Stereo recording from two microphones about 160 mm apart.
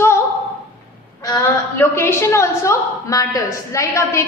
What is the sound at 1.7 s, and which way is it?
A woman's voice, 15° left (ahead or behind).